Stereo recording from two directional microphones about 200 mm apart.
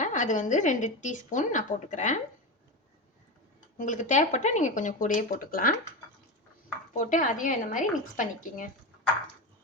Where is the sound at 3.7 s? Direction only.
40° left (ahead or behind).